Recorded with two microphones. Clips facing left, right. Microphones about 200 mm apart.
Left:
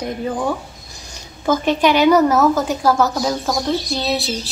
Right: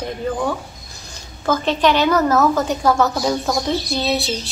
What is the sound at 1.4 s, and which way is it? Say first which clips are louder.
A woman's voice: left 1 dB; 10° left (ahead or behind).